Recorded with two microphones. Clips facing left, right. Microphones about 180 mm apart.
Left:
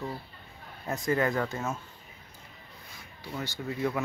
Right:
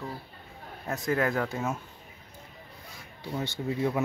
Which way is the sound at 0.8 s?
Centre (ahead or behind).